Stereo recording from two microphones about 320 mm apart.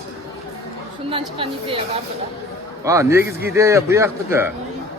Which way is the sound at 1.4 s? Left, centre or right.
Centre.